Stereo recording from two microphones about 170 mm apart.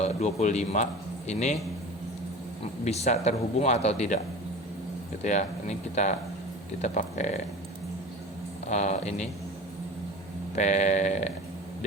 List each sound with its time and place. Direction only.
0.0 s speech: 40° left (ahead or behind)
2.8 s speech: 40° left (ahead or behind)
5.2 s speech: 45° left (ahead or behind)
8.6 s speech: 40° left (ahead or behind)
10.5 s speech: 45° left (ahead or behind)